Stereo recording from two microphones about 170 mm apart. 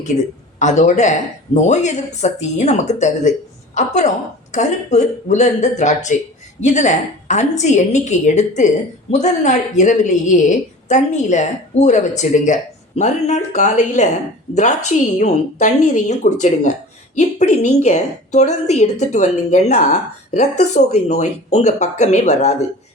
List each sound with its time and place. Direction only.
0.6 s a woman's voice: 45° left (ahead or behind)
15.2 s a woman's voice: 45° left (ahead or behind)